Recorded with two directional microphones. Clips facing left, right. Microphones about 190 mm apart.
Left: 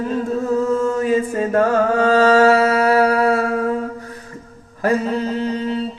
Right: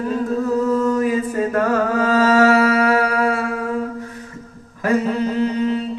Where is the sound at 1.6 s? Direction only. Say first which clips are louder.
Left 4 dB; 30° left (ahead or behind).